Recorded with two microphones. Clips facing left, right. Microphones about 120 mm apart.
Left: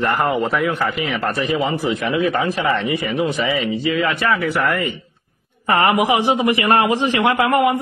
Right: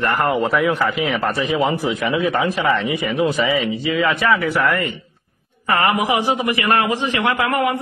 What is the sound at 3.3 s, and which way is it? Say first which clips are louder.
A man's voice: right 1 dB; centre (ahead or behind).